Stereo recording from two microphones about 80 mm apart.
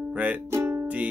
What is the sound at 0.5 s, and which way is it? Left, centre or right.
Music, right.